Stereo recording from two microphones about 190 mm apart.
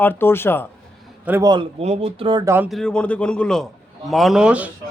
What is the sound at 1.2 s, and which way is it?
Speech, 10° right (ahead or behind).